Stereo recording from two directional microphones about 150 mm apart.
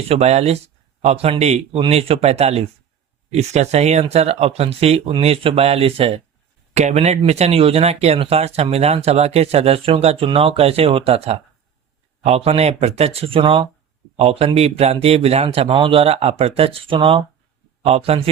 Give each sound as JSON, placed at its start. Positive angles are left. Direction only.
{"t": 0.1, "sound": "speech", "side_deg": -45}